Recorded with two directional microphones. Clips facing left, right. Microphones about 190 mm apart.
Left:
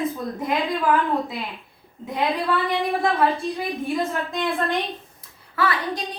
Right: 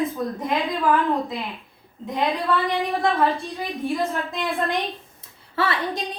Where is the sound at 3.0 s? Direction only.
Centre (ahead or behind).